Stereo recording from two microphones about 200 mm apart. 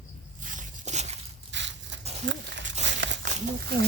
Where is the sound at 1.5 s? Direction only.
65° right (ahead or behind).